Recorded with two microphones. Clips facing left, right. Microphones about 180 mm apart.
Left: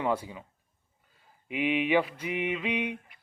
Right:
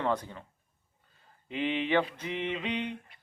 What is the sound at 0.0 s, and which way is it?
Speech, 10° left (ahead or behind).